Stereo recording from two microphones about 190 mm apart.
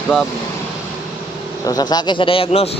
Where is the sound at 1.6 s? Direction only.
20° left (ahead or behind).